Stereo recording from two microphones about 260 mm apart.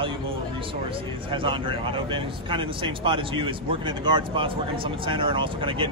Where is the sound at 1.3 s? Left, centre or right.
Centre.